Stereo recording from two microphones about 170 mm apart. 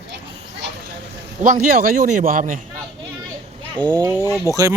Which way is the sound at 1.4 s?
45° right (ahead or behind).